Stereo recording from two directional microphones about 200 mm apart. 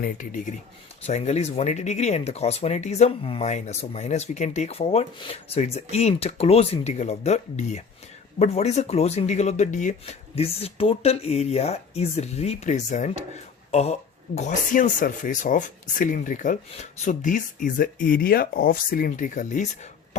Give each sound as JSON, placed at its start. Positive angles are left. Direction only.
{"t": 0.0, "sound": "speech", "side_deg": 40}